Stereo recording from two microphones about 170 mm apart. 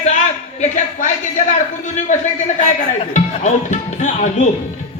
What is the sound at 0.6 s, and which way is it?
Speech, 45° left (ahead or behind).